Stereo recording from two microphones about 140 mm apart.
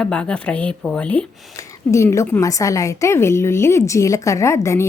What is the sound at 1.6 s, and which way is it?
A woman's voice, 20° left (ahead or behind).